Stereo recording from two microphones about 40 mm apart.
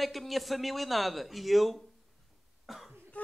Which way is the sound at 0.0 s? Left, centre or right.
Centre.